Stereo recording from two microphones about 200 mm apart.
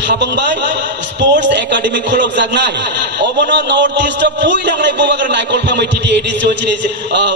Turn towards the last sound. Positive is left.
turn(degrees=-60)  # may be behind; listen again after turning